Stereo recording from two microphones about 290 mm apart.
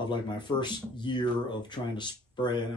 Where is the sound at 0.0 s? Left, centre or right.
Centre.